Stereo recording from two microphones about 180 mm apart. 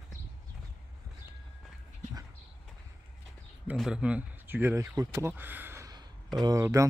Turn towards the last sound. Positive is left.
turn(degrees=-15)  # may be behind; listen again after turning